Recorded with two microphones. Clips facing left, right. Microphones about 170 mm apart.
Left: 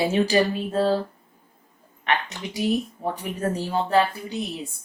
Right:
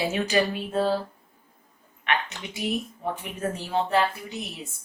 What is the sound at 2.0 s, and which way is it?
A woman's voice, 35° left (ahead or behind).